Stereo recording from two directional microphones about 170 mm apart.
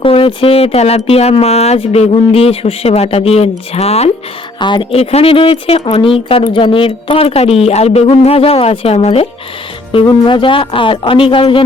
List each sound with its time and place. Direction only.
0.0 s speech: 30° left (ahead or behind)